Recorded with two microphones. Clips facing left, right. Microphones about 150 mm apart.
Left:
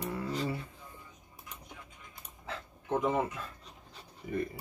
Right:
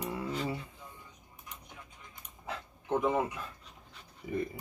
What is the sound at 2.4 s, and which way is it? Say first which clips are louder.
Dog: right 1 dB; 15° right (ahead or behind).